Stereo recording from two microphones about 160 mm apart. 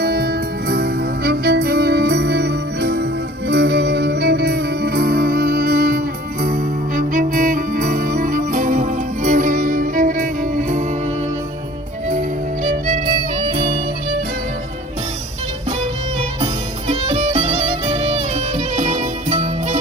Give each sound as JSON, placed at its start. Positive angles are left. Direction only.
{"t": 0.0, "sound": "music", "side_deg": -75}
{"t": 16.9, "sound": "music", "side_deg": -40}